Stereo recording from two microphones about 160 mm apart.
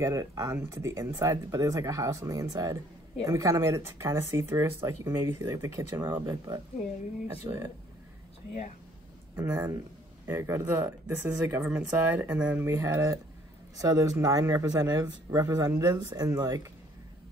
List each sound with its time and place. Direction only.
0.0 s speech: 20° right (ahead or behind)
9.3 s speech: 15° right (ahead or behind)